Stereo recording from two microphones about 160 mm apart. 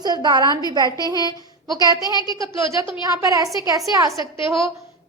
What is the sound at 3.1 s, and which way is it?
Speech, 20° right (ahead or behind).